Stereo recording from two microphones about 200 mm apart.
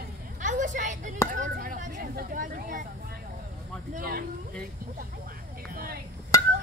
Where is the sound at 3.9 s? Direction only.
50° right (ahead or behind).